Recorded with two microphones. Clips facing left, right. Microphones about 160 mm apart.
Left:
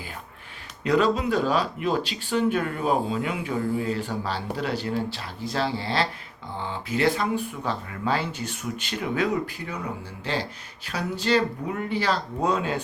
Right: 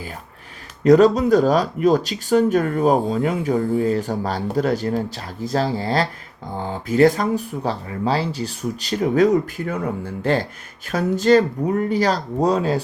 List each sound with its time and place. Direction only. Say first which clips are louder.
0.9 s speech: right 9 dB; 45° right (ahead or behind)